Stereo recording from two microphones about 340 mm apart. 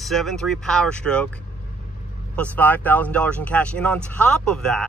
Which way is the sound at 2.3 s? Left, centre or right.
Centre.